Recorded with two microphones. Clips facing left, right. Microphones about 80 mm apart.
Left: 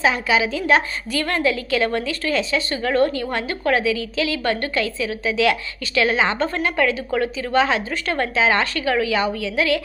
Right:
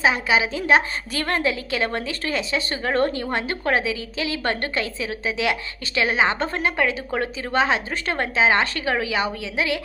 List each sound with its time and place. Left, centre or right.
0.0 s a woman's voice: right